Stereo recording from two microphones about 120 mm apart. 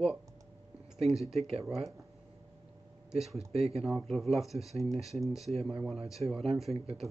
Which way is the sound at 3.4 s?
55° right (ahead or behind).